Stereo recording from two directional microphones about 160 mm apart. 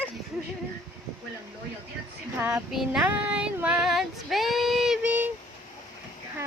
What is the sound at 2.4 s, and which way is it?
Child singing, 10° right (ahead or behind).